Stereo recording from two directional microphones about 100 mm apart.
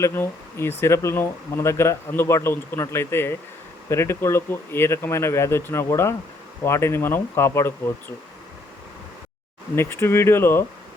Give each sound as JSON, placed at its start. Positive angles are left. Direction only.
{"t": 0.0, "sound": "speech", "side_deg": 25}
{"t": 9.7, "sound": "speech", "side_deg": 25}